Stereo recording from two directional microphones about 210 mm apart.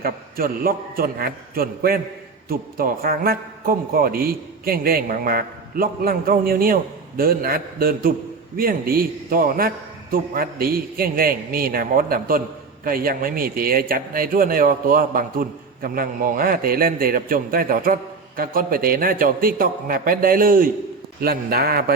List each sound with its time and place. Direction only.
0.0 s speech: 45° right (ahead or behind)